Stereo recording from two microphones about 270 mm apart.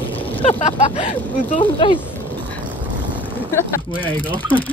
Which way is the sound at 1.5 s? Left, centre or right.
Centre.